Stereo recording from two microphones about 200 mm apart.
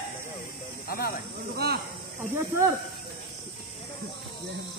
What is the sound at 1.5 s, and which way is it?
Speech, 50° right (ahead or behind).